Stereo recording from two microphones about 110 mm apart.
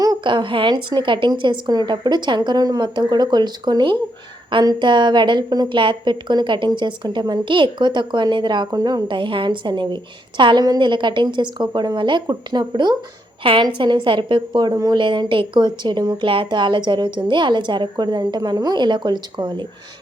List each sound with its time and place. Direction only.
0.3 s a woman's voice: 50° right (ahead or behind)
14.7 s speech: 30° right (ahead or behind)
14.9 s a woman's voice: 50° right (ahead or behind)